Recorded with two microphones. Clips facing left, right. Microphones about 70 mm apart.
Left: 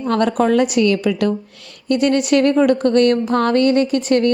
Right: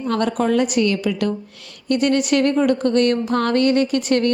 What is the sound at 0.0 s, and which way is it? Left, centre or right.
A woman's voice, left.